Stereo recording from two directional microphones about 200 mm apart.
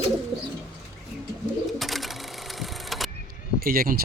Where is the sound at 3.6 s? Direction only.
45° right (ahead or behind).